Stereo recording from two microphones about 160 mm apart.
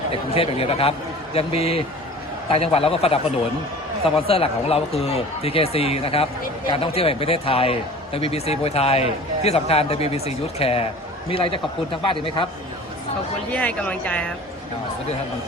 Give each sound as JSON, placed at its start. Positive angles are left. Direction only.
{"t": 0.1, "sound": "speech", "side_deg": 35}
{"t": 4.3, "sound": "speech", "side_deg": 40}
{"t": 13.5, "sound": "speech", "side_deg": 10}